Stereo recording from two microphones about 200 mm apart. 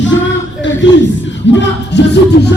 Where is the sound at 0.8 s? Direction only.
65° left (ahead or behind).